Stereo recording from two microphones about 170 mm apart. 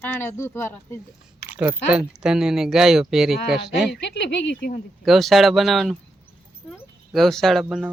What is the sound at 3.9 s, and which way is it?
Speech, 90° left.